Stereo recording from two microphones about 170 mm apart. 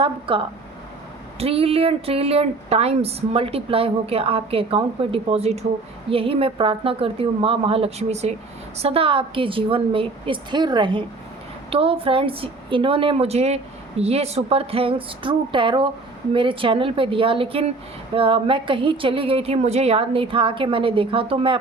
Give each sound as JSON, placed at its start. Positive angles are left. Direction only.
{"t": 0.0, "sound": "speech", "side_deg": -30}